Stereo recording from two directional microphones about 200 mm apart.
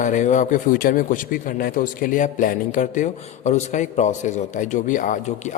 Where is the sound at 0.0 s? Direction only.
40° left (ahead or behind).